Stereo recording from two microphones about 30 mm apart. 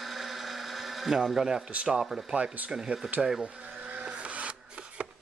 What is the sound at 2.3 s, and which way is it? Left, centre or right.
Speech, right.